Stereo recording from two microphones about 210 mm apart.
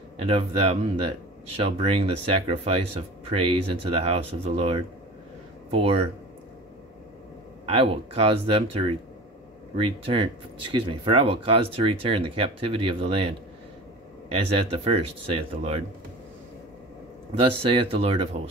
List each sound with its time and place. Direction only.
0.2 s speech: 30° right (ahead or behind)
7.6 s speech: 25° right (ahead or behind)
14.3 s speech: 25° right (ahead or behind)
17.4 s speech: 25° right (ahead or behind)